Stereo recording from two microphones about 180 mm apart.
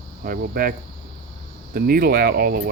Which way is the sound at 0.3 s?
55° right (ahead or behind).